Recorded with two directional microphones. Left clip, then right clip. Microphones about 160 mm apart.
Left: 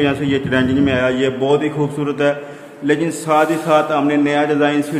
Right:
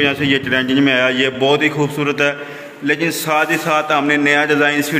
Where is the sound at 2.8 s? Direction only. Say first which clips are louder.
Even; 15° left (ahead or behind).